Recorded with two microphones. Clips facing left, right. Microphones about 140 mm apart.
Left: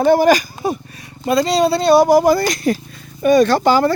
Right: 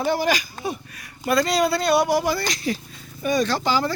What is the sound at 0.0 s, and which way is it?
Speech, 50° left (ahead or behind).